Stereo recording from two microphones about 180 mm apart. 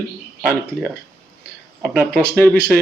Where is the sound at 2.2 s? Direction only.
5° left (ahead or behind).